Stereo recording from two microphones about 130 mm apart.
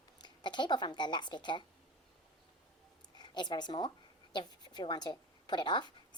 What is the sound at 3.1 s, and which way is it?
A woman's voice, 35° left (ahead or behind).